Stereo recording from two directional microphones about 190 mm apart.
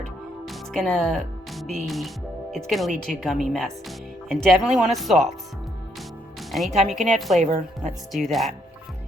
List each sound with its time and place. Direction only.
0.4 s speech: centre (ahead or behind)
6.5 s speech: centre (ahead or behind)
7.4 s speech: 40° right (ahead or behind)
8.1 s speech: centre (ahead or behind)